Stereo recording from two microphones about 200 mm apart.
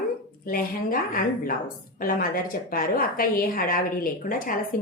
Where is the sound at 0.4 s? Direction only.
45° left (ahead or behind).